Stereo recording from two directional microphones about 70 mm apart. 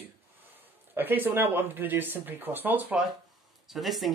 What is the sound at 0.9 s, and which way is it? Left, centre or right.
Speech, right.